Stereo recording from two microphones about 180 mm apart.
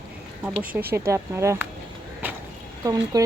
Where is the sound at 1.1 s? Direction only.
15° right (ahead or behind).